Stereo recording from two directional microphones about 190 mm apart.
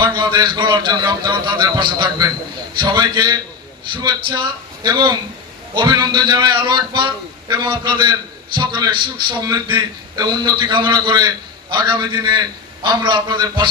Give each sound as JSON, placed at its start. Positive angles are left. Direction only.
{"t": 0.0, "sound": "a man's voice", "side_deg": -25}